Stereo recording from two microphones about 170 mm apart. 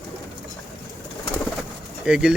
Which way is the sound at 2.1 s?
5° right (ahead or behind).